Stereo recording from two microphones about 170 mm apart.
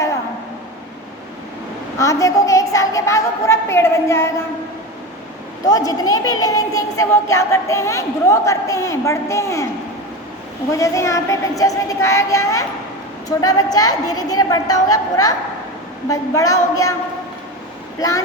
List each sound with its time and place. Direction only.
2.0 s a woman's voice: 20° left (ahead or behind)
5.6 s a woman's voice: 20° left (ahead or behind)
10.7 s a woman's voice: 20° left (ahead or behind)